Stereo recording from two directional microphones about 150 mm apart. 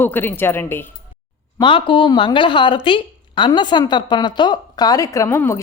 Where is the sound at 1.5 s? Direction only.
35° left (ahead or behind); by 5.6 s 15° left (ahead or behind).